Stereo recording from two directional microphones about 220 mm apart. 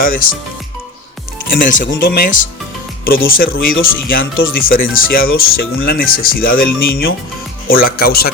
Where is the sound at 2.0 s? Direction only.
45° left (ahead or behind).